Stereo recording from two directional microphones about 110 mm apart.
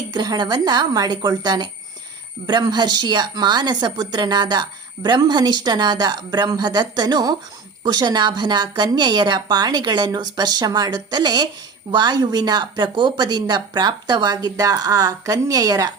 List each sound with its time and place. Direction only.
0.1 s speech: 40° right (ahead or behind)